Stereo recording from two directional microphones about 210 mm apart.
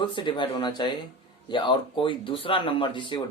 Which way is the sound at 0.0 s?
20° left (ahead or behind).